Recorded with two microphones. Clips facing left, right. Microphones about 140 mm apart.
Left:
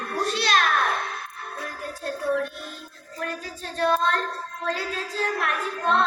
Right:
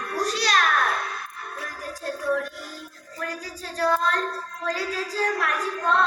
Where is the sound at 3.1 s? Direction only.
25° left (ahead or behind).